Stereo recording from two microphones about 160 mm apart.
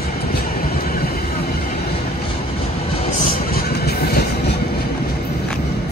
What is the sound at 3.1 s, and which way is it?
Train, 60° left (ahead or behind).